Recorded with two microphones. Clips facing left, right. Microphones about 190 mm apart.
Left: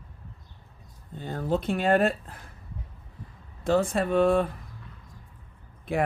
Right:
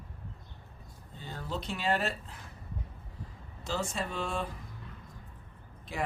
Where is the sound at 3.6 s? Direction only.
55° left (ahead or behind).